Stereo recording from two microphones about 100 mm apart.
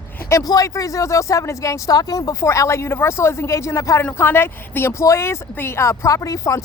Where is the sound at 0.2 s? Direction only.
30° left (ahead or behind).